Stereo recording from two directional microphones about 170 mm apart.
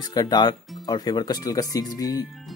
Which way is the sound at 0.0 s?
20° left (ahead or behind).